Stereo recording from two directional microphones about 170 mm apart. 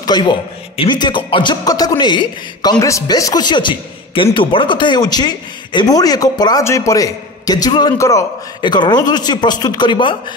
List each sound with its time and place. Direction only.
0.0 s a man's voice: 25° left (ahead or behind)